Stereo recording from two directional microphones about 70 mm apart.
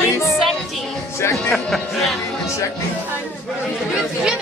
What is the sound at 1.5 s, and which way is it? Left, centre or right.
Speech, centre.